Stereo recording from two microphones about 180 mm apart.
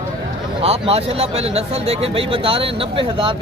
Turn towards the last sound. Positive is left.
turn(degrees=-30)  # may be behind; listen again after turning